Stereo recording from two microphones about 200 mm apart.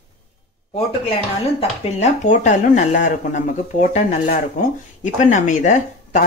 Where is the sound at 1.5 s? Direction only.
30° left (ahead or behind).